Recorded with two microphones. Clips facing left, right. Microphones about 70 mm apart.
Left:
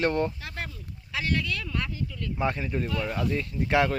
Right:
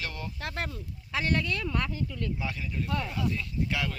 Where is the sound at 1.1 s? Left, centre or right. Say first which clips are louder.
Even; right.